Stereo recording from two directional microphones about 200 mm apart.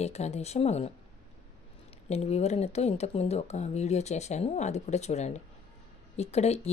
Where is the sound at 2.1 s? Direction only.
30° left (ahead or behind).